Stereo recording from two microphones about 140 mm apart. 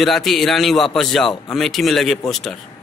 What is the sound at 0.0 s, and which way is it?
A man's voice, centre (ahead or behind).